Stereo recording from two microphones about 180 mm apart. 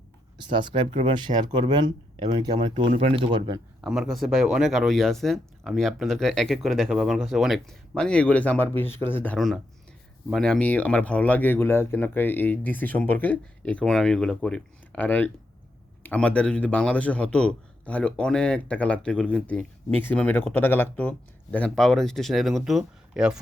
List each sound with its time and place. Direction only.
0.5 s speech: 25° right (ahead or behind)
3.8 s a man's voice: 5° right (ahead or behind)